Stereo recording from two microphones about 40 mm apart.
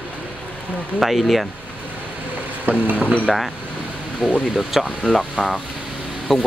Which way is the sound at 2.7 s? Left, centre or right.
Right.